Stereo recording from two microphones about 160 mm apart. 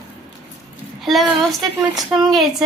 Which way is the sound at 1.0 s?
Centre (ahead or behind).